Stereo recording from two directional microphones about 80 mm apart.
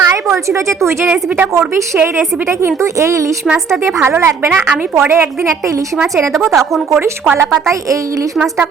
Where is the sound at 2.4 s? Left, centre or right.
Right.